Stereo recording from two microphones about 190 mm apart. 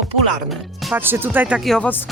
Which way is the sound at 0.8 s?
10° right (ahead or behind).